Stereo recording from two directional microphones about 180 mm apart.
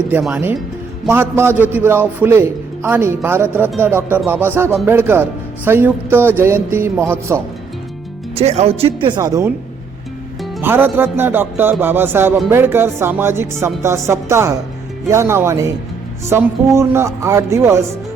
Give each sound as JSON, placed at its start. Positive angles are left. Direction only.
{"t": 0.1, "sound": "a man's voice", "side_deg": -5}
{"t": 8.4, "sound": "speech", "side_deg": -35}
{"t": 10.6, "sound": "a man's voice", "side_deg": -10}